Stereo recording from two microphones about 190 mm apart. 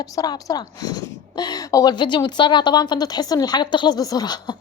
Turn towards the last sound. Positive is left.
turn(degrees=20)  # may be behind; listen again after turning